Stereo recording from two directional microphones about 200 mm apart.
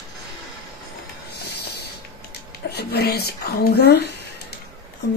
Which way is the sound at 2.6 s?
55° left (ahead or behind).